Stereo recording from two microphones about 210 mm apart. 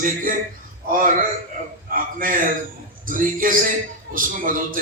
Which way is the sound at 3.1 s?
40° right (ahead or behind).